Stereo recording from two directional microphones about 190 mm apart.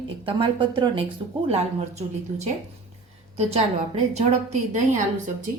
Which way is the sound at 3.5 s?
35° right (ahead or behind).